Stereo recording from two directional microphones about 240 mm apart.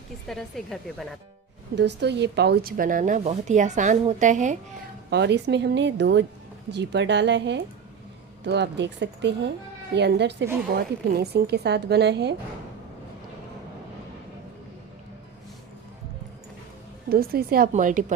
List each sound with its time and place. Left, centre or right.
0.3 s speech: centre
1.7 s a woman's voice: right
5.1 s speech: right
17.1 s a woman's voice: right